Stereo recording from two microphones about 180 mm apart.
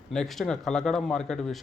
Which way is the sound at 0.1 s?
Centre (ahead or behind).